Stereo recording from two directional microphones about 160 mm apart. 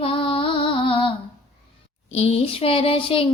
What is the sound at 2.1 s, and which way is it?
Music, 40° left (ahead or behind).